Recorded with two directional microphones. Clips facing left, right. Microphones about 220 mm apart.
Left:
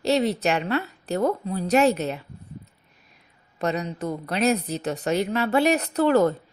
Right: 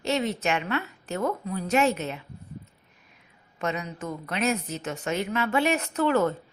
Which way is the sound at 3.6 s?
35° left (ahead or behind).